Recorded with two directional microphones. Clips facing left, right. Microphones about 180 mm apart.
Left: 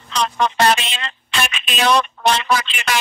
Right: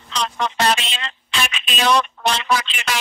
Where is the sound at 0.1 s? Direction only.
55° left (ahead or behind).